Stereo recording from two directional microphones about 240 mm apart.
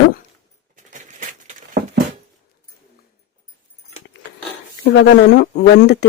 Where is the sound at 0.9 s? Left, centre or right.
Right.